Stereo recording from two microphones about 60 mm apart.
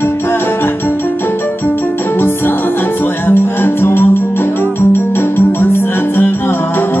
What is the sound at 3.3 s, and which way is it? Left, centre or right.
Music, left.